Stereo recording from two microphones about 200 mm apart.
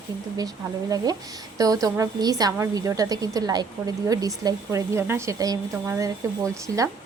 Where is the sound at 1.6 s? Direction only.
15° right (ahead or behind).